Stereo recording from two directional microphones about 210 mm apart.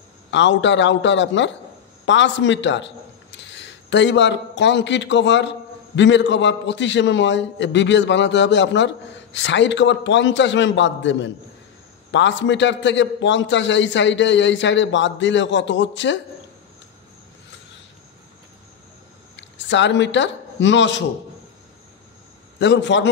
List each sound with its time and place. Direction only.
0.3 s a man's voice: 60° left (ahead or behind)
19.3 s speech: 60° left (ahead or behind)
22.6 s a man's voice: 55° left (ahead or behind)